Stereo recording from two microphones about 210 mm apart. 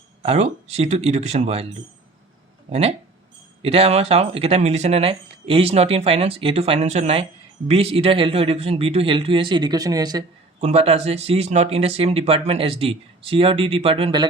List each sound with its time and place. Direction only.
0.2 s speech: 30° right (ahead or behind)
2.6 s speech: 30° right (ahead or behind)
10.6 s speech: 30° right (ahead or behind)